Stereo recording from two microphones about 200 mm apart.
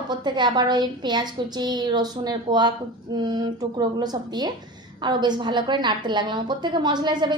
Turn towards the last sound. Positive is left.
turn(degrees=-20)  # may be behind; listen again after turning